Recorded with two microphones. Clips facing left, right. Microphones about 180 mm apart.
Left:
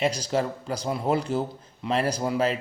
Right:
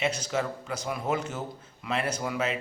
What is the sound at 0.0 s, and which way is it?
A man's voice, 35° left (ahead or behind).